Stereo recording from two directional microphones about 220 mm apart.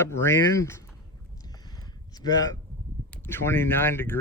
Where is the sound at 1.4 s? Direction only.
20° left (ahead or behind).